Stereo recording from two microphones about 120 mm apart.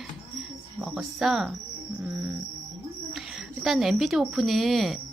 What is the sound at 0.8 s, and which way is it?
Speech, 5° right (ahead or behind).